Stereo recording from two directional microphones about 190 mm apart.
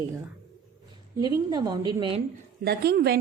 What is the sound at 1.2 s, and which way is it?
A woman's voice, 20° right (ahead or behind).